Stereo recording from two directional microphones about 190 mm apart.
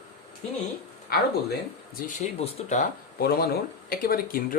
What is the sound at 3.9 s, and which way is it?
Speech, 50° left (ahead or behind).